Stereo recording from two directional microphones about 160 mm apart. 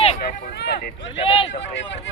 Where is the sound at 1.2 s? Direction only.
35° left (ahead or behind).